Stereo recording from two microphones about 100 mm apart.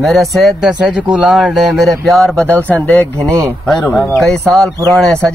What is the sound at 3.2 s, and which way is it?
Speech, 30° right (ahead or behind).